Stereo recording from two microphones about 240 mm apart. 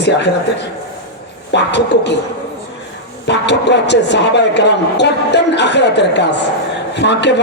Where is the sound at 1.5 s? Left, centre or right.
Left.